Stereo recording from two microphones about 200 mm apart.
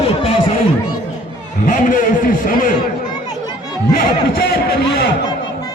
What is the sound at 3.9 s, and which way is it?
A man's voice, 50° left (ahead or behind).